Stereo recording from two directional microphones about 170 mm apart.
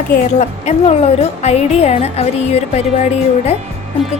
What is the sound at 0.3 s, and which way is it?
A woman's voice, 45° left (ahead or behind).